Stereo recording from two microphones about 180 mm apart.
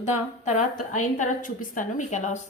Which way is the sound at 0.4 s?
40° left (ahead or behind).